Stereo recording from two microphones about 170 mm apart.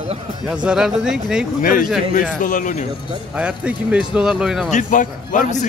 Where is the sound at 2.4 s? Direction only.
50° left (ahead or behind).